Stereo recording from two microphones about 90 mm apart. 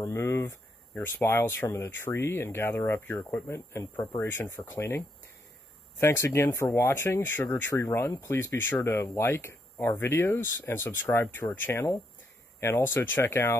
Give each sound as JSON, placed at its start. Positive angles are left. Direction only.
{"t": 0.0, "sound": "speech", "side_deg": 30}
{"t": 3.5, "sound": "speech", "side_deg": 35}
{"t": 4.2, "sound": "speech", "side_deg": 25}